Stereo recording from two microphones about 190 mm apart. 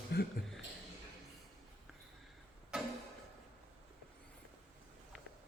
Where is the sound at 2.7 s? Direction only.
5° right (ahead or behind).